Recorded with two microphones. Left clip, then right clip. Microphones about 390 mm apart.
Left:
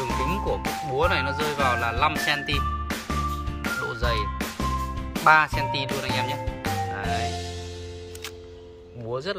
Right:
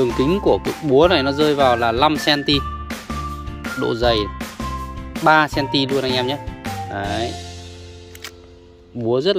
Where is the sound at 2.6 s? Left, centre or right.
Centre.